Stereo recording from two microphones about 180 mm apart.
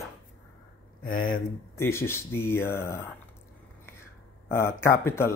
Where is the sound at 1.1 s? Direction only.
50° left (ahead or behind).